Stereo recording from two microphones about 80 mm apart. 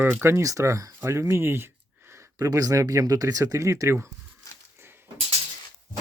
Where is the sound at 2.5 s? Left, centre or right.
Right.